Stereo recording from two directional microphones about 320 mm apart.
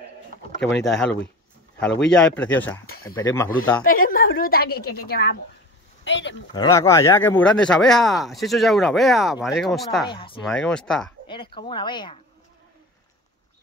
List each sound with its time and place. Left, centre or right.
0.8 s speech: centre
3.8 s a woman's voice: left
6.5 s speech: centre
10.0 s speech: centre
10.4 s speech: centre
11.2 s speech: centre